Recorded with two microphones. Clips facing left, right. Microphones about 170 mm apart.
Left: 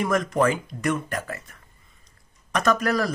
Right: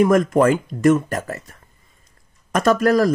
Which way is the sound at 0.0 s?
50° right (ahead or behind).